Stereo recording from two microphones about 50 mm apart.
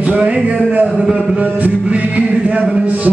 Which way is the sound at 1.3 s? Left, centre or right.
Right.